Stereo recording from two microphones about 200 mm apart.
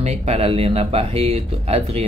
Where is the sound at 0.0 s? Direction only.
35° right (ahead or behind).